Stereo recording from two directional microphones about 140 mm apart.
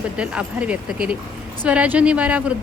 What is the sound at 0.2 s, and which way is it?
A woman's voice, 10° right (ahead or behind).